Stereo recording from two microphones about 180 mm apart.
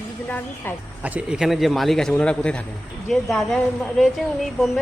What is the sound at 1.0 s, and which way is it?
A man's voice, 5° right (ahead or behind).